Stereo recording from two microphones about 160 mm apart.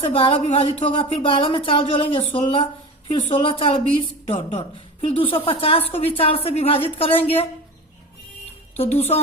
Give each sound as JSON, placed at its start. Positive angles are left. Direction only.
{"t": 0.1, "sound": "a woman's voice", "side_deg": 35}
{"t": 8.7, "sound": "a woman's voice", "side_deg": 40}